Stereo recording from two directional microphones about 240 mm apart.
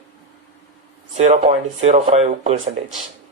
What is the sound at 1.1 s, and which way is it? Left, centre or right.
Speech, right.